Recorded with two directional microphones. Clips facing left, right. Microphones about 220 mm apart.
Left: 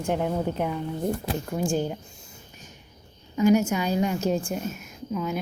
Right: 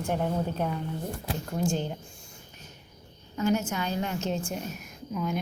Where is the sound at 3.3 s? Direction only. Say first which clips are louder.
Left 7 dB; 10° left (ahead or behind).